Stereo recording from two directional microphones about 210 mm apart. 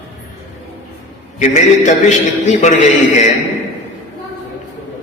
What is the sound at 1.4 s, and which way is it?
A man's voice, 35° left (ahead or behind).